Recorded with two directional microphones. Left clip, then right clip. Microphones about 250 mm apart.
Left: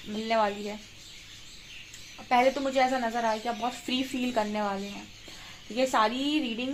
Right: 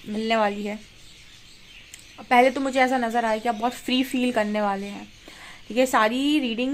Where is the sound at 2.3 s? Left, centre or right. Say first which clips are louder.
Right 5 dB; right.